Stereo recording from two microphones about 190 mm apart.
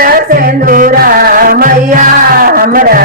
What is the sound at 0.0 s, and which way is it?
Music, 50° right (ahead or behind).